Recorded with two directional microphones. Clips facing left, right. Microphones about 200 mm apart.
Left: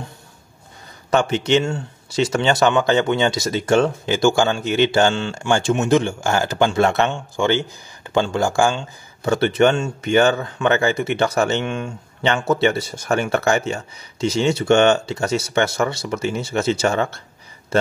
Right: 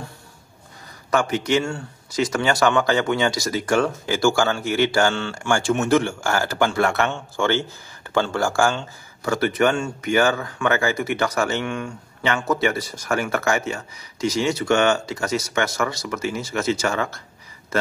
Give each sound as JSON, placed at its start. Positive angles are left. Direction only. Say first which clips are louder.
{"t": 1.1, "sound": "speech", "louder": "left 3 dB", "side_deg": 25}